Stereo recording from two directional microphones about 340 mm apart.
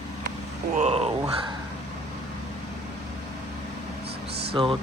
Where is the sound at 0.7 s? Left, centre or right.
Centre.